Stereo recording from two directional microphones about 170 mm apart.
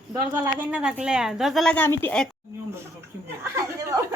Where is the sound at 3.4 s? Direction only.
20° right (ahead or behind).